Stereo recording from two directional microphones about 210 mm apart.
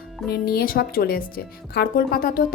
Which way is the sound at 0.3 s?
45° left (ahead or behind).